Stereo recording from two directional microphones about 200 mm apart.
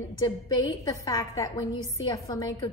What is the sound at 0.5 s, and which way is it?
A woman's voice, 20° left (ahead or behind).